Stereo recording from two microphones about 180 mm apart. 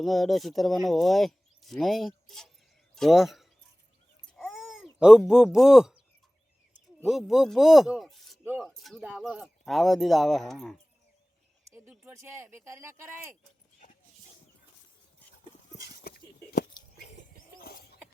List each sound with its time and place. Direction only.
0.0 s speech: centre (ahead or behind)
4.4 s babbling: centre (ahead or behind)
4.9 s speech: 5° right (ahead or behind)
7.0 s a man's voice: centre (ahead or behind)
11.7 s speech: 15° right (ahead or behind)
16.0 s a sound: 60° left (ahead or behind)